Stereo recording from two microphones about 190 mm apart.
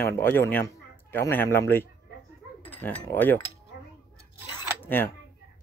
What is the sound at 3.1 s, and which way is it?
Speech, 10° left (ahead or behind).